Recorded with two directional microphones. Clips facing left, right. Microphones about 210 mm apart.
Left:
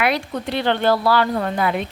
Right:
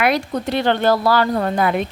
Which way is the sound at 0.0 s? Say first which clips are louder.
Right 3 dB; 45° right (ahead or behind).